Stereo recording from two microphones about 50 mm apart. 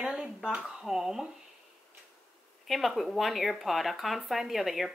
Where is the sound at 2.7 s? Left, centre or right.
Centre.